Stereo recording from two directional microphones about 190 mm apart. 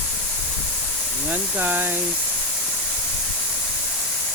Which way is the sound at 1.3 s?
10° right (ahead or behind).